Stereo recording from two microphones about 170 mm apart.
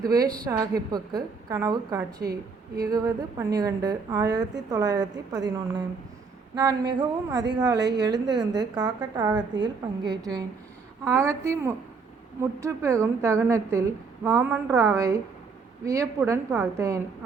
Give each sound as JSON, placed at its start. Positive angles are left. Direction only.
{"t": 0.0, "sound": "a woman's voice", "side_deg": -20}